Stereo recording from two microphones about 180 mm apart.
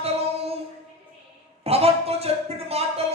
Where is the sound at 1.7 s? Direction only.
35° right (ahead or behind).